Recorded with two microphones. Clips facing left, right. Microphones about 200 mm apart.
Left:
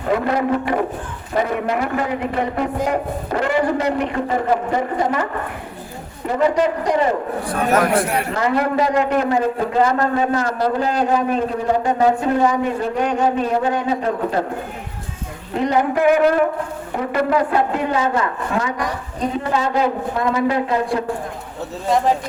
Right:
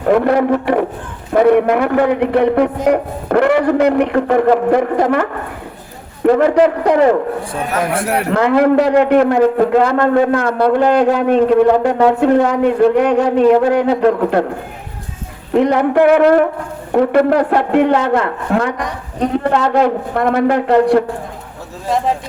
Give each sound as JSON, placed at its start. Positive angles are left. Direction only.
{"t": 0.1, "sound": "a man's voice", "side_deg": -55}
{"t": 8.1, "sound": "a man's voice", "side_deg": -65}
{"t": 15.5, "sound": "a man's voice", "side_deg": -70}
{"t": 21.8, "sound": "speech", "side_deg": 0}